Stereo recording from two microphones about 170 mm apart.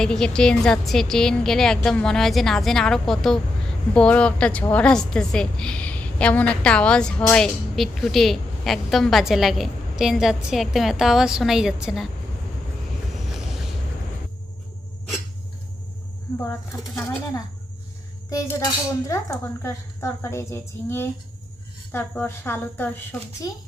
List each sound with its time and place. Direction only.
0.0 s a woman's voice: 5° left (ahead or behind)
13.3 s a sound: centre (ahead or behind)
16.4 s speech: 15° left (ahead or behind)
23.4 s speech: 20° left (ahead or behind)